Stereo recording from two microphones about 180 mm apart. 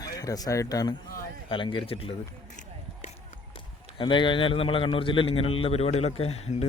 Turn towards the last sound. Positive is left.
turn(degrees=35)  # may be behind; listen again after turning